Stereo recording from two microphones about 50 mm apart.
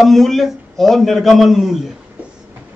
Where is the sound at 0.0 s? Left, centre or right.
Centre.